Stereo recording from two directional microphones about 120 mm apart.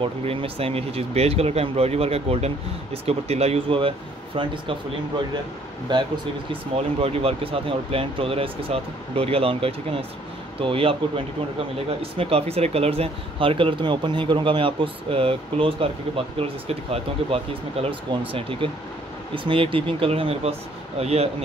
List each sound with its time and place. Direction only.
0.0 s speech: 50° right (ahead or behind)
5.9 s speech: 40° right (ahead or behind)
6.5 s speech: 50° right (ahead or behind)